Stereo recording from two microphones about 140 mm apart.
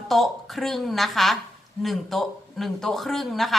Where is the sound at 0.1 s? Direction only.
Centre (ahead or behind).